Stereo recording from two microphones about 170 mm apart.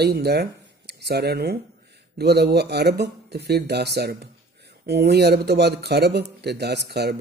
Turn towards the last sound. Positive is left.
turn(degrees=-70)  # may be behind; listen again after turning